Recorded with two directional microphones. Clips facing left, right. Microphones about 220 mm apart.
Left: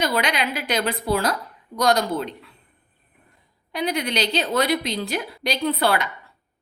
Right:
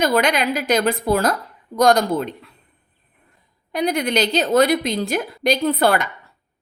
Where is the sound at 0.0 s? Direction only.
45° right (ahead or behind).